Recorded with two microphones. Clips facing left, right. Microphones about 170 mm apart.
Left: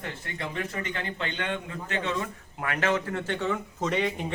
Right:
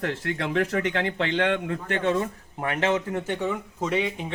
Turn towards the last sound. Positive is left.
turn(degrees=0)  # may be behind; listen again after turning